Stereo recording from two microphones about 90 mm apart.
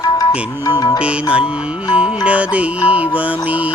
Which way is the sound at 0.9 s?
15° right (ahead or behind).